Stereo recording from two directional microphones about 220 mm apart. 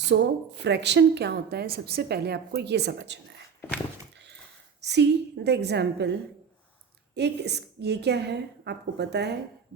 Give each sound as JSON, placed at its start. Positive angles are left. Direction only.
{"t": 0.1, "sound": "a woman's voice", "side_deg": -50}
{"t": 4.8, "sound": "a woman's voice", "side_deg": -50}